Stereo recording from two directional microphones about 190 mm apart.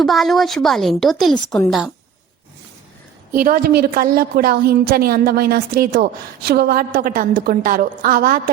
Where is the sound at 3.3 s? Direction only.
50° right (ahead or behind).